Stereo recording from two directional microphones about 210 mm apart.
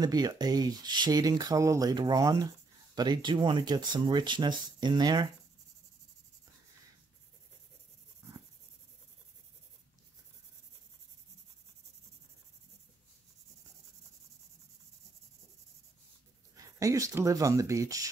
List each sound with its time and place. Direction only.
0.0 s speech: 20° right (ahead or behind)
8.2 s writing: 15° right (ahead or behind)
16.5 s speech: 15° right (ahead or behind)